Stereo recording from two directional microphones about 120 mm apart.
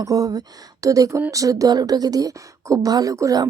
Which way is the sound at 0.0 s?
30° right (ahead or behind).